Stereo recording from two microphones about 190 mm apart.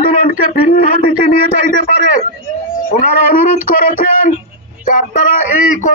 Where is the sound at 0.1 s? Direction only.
45° left (ahead or behind).